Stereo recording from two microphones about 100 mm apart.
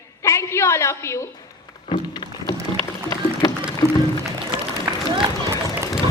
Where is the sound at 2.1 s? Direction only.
45° left (ahead or behind).